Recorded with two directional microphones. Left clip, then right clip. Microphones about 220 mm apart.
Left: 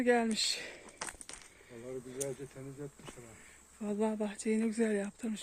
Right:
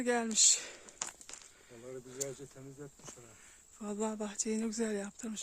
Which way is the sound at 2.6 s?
15° right (ahead or behind).